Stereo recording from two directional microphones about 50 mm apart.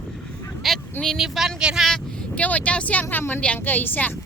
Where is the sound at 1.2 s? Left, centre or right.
Centre.